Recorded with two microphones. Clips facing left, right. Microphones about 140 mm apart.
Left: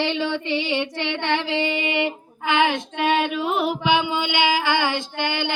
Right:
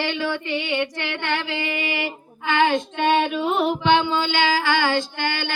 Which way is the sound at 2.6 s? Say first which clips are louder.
Right 2 dB; 5° left (ahead or behind).